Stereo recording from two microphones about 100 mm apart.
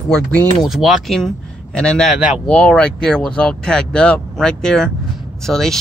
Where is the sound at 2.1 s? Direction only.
5° right (ahead or behind).